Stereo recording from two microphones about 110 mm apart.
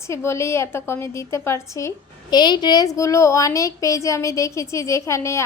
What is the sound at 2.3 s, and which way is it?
A woman's voice, 40° left (ahead or behind).